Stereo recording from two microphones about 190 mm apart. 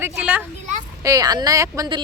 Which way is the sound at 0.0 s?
5° right (ahead or behind).